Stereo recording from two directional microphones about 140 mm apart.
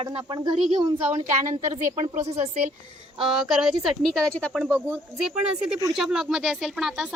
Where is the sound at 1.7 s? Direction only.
55° right (ahead or behind).